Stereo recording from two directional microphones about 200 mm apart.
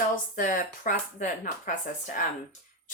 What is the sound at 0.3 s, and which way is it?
Speech, 40° left (ahead or behind).